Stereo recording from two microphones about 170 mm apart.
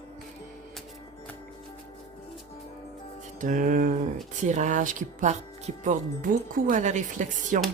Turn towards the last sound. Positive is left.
turn(degrees=-45)  # may be behind; listen again after turning